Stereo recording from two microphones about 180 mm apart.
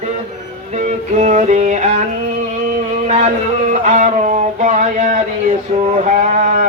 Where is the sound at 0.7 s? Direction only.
40° right (ahead or behind).